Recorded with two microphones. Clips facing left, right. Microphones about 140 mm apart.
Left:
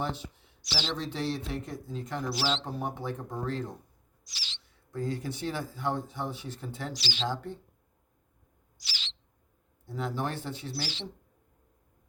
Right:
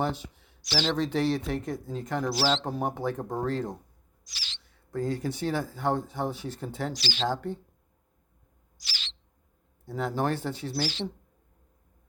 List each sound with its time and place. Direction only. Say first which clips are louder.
0.6 s speech: right 7 dB; 45° right (ahead or behind)
2.3 s speech: right 4 dB; 35° right (ahead or behind)
4.3 s owl: right 1 dB; 50° right (ahead or behind)
4.9 s speech: right 4 dB; 40° right (ahead or behind)
8.8 s bird: right 1 dB; 45° right (ahead or behind)
10.0 s speech: right 5 dB; 40° right (ahead or behind)